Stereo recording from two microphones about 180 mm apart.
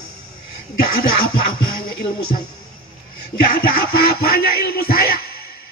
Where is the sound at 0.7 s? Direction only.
55° left (ahead or behind).